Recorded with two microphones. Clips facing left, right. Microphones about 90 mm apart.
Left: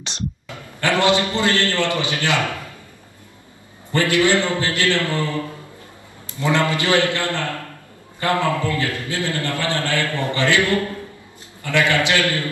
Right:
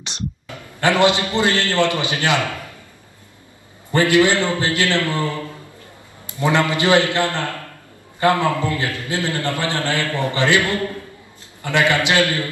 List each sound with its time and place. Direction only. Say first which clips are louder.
0.7 s a man's voice: right 2 dB; 20° right (ahead or behind)
3.9 s a man's voice: right 2 dB; 20° right (ahead or behind)
6.4 s a man's voice: right 2 dB; 20° right (ahead or behind)